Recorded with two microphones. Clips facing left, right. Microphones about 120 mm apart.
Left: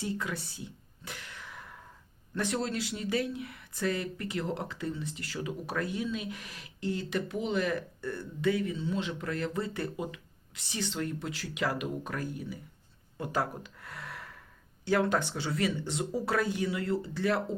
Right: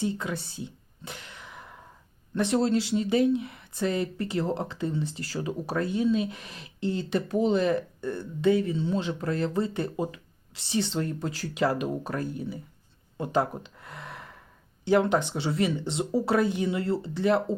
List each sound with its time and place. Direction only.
0.0 s speech: 25° right (ahead or behind)
13.1 s gasp: 25° right (ahead or behind)
14.8 s speech: 20° right (ahead or behind)